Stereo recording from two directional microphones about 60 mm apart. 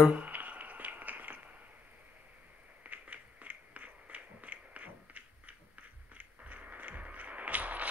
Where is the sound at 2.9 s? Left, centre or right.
Right.